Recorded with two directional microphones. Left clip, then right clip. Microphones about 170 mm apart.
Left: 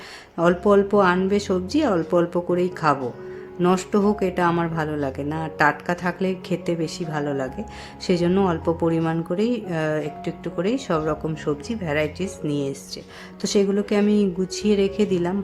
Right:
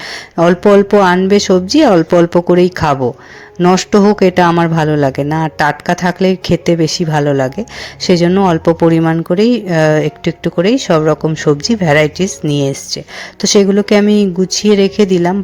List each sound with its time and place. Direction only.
0.3 s speech: 40° right (ahead or behind)